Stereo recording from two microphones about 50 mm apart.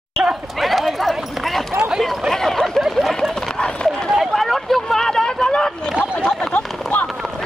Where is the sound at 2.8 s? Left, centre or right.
Centre.